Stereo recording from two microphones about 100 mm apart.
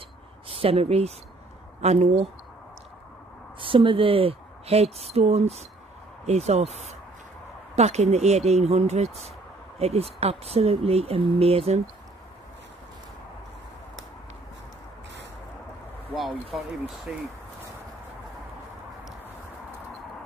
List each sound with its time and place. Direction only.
0.5 s speech: 70° right (ahead or behind); by 2.2 s 90° right
3.5 s speech: 60° right (ahead or behind); by 11.7 s 80° right
16.5 s speech: 5° right (ahead or behind)